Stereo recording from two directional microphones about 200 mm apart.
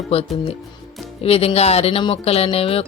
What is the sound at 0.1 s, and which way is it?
Speech, 30° left (ahead or behind).